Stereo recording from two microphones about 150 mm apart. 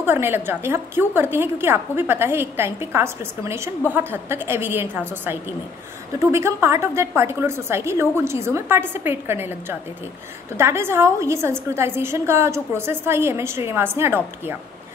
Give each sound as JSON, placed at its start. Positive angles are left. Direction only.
{"t": 0.0, "sound": "a woman's voice", "side_deg": -15}